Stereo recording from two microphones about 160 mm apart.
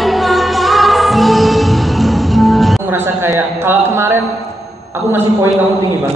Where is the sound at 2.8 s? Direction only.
15° right (ahead or behind).